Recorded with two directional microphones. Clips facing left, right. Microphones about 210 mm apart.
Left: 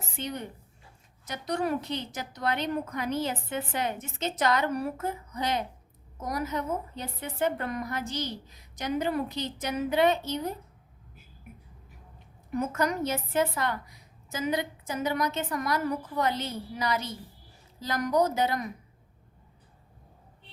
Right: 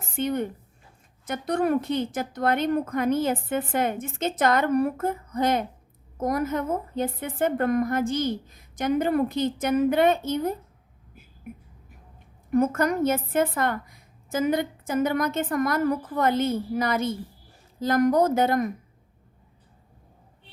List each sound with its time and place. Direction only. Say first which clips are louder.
0.2 s a woman's voice: right 10 dB; 50° right (ahead or behind)
12.5 s a woman's voice: right 6 dB; 50° right (ahead or behind)